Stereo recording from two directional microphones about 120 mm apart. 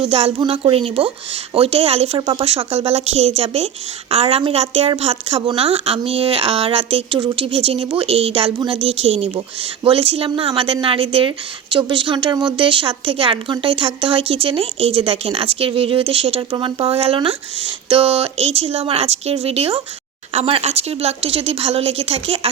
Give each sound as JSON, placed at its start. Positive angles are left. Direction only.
{"t": 0.0, "sound": "a woman's voice", "side_deg": -55}